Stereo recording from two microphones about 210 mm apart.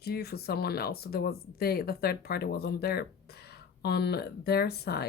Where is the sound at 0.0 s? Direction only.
50° left (ahead or behind).